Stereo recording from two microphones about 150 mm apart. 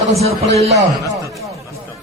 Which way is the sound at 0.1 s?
45° right (ahead or behind).